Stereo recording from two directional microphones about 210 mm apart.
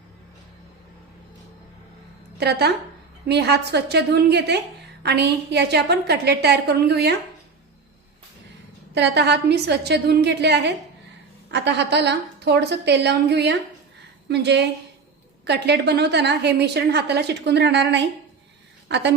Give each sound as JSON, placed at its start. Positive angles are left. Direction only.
{"t": 2.4, "sound": "a woman's voice", "side_deg": -50}
{"t": 9.0, "sound": "a woman's voice", "side_deg": -55}